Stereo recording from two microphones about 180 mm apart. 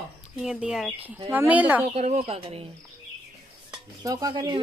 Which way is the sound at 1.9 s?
35° right (ahead or behind).